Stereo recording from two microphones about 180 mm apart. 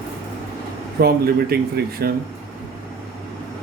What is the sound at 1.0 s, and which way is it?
Speech, 60° right (ahead or behind).